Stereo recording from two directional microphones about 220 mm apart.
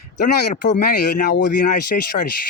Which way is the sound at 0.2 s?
35° left (ahead or behind).